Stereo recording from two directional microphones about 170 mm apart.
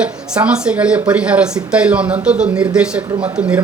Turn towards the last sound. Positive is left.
turn(degrees=-5)  # may be behind; listen again after turning